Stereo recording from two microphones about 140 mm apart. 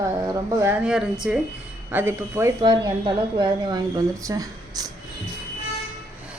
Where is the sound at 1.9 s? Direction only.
15° right (ahead or behind).